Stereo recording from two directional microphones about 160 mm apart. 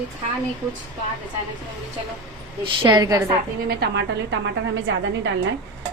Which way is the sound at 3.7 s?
90° right.